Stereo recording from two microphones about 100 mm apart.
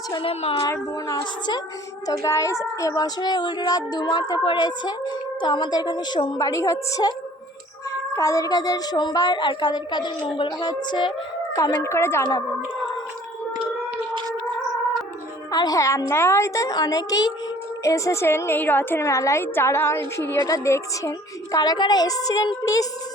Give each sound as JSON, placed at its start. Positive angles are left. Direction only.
{"t": 0.2, "sound": "speech", "side_deg": 65}
{"t": 0.6, "sound": "speech", "side_deg": 35}
{"t": 2.2, "sound": "speech", "side_deg": 30}
{"t": 11.5, "sound": "speech", "side_deg": 30}
{"t": 15.5, "sound": "speech", "side_deg": 40}
{"t": 17.8, "sound": "a woman's voice", "side_deg": 30}